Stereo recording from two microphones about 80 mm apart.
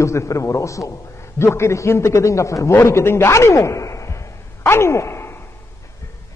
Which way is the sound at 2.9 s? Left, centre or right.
Left.